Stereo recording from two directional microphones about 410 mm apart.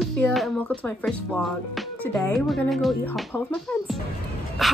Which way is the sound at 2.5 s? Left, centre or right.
Centre.